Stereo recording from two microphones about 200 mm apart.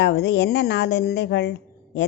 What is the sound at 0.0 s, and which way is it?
A woman's voice, 60° left (ahead or behind).